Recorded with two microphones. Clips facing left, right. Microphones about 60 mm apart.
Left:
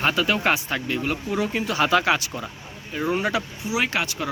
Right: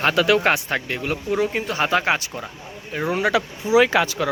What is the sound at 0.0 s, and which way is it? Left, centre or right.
Speech, right.